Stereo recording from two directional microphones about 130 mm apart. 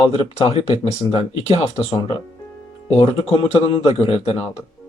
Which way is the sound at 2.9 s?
50° left (ahead or behind).